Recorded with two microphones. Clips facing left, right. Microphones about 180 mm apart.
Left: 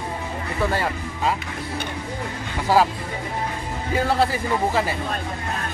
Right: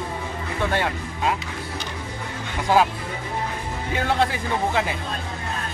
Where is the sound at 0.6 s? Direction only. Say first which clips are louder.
Even; centre (ahead or behind).